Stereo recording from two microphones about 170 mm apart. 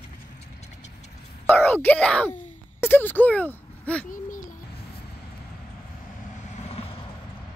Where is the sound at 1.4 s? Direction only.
10° left (ahead or behind).